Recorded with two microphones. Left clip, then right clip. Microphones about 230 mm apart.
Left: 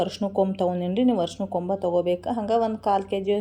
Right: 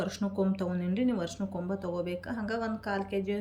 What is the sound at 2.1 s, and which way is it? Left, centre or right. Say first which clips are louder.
Speech: left 11 dB; centre.